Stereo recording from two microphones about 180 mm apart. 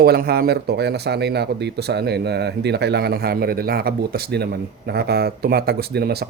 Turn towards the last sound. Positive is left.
turn(degrees=-60)  # may be behind; listen again after turning